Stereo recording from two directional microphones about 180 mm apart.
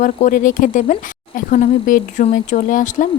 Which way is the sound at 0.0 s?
45° left (ahead or behind).